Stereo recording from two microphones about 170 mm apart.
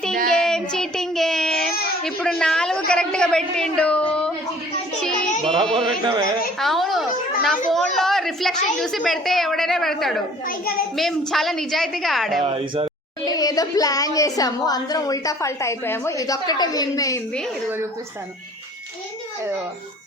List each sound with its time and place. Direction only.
0.3 s child singing: 5° left (ahead or behind)
2.0 s a sound: 5° left (ahead or behind)
2.9 s a woman's voice: 5° left (ahead or behind)
5.0 s music: 5° left (ahead or behind)
6.6 s a sound: centre (ahead or behind)
7.7 s a woman's voice: centre (ahead or behind)
10.4 s a child's voice: 60° left (ahead or behind)
10.9 s a woman's voice: centre (ahead or behind)
12.4 s speech: 35° right (ahead or behind)
13.2 s speech: 20° left (ahead or behind)